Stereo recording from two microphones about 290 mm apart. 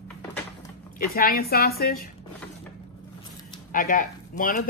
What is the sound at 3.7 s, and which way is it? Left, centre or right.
Speech, left.